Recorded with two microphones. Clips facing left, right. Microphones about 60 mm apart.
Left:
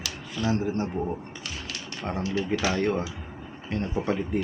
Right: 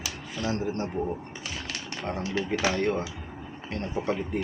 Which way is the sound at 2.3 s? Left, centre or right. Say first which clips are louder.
Even; right.